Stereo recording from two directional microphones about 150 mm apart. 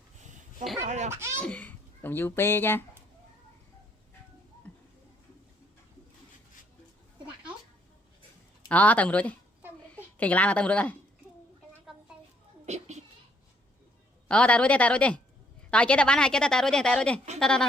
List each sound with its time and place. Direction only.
0.9 s speech: 50° right (ahead or behind)
1.1 s speech: 20° right (ahead or behind)
1.4 s a child's voice: 10° left (ahead or behind)
4.7 s a sound: 10° left (ahead or behind)
8.7 s a woman's voice: 10° left (ahead or behind)
12.6 s a sound: 50° right (ahead or behind)
14.3 s a woman's voice: 10° left (ahead or behind)